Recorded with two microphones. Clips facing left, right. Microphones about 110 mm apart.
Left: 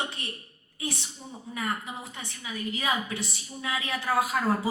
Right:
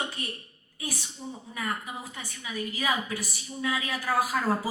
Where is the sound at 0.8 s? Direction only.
25° left (ahead or behind).